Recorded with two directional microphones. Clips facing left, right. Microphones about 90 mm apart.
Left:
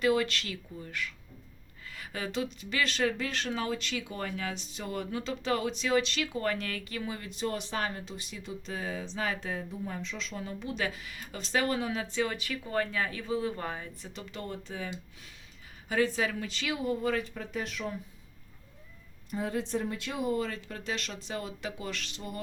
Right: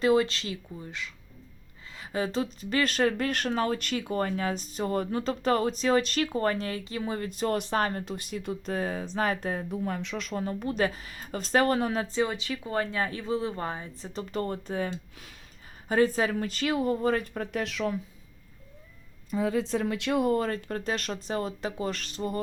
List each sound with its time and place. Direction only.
0.0 s speech: 30° right (ahead or behind)
7.1 s speech: 45° right (ahead or behind)
9.8 s speech: 70° right (ahead or behind); by 12.2 s 40° right (ahead or behind)
12.2 s speech: 20° right (ahead or behind); by 14.8 s 45° right (ahead or behind)
15.9 s speech: 40° right (ahead or behind); by 17.9 s 90° right
19.7 s speech: 90° right; by 22.4 s 40° right (ahead or behind)